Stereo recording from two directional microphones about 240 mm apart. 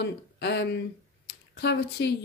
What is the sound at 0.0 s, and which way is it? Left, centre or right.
Speech, left.